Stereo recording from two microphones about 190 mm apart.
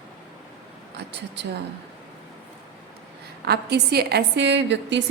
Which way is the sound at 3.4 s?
60° right (ahead or behind).